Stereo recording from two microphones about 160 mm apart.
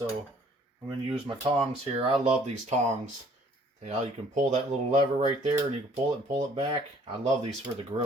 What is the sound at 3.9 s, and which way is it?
Speech, 45° right (ahead or behind).